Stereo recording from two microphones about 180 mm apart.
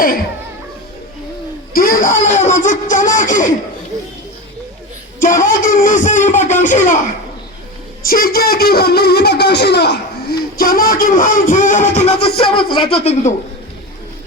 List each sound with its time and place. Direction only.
1.7 s speech: 50° left (ahead or behind)
5.2 s speech: 50° left (ahead or behind)
8.0 s speech: 55° left (ahead or behind)
10.6 s speech: 55° left (ahead or behind); by 13.3 s 35° left (ahead or behind)